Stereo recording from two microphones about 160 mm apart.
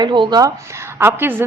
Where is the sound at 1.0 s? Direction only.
15° right (ahead or behind).